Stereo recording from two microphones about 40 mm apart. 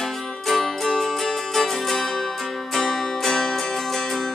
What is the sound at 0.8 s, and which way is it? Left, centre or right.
Music, centre.